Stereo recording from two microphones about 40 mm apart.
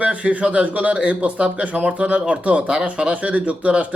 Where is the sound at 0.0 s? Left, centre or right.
Right.